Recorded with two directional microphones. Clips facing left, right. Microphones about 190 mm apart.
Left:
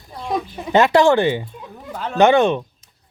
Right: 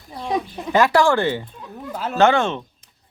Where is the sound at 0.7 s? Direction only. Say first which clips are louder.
Left 3 dB; 20° left (ahead or behind).